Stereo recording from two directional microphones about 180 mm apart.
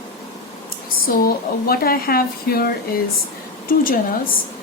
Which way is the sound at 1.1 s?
55° left (ahead or behind).